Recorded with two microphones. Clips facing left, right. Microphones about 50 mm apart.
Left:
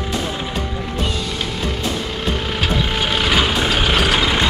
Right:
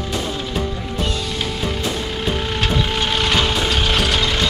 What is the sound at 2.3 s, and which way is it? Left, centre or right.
Vehicle, centre.